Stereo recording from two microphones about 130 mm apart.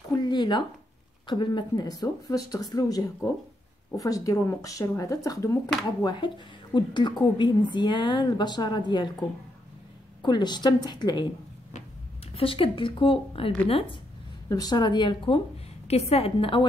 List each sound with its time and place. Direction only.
0.1 s a sound: 35° left (ahead or behind)
1.2 s speech: 35° left (ahead or behind)
6.0 s a woman's voice: 35° left (ahead or behind)
10.2 s a woman's voice: 35° left (ahead or behind)
12.4 s a woman's voice: 45° left (ahead or behind)
14.5 s a woman's voice: 30° left (ahead or behind)